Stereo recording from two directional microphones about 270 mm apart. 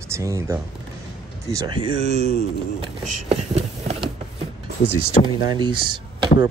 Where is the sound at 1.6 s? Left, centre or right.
Right.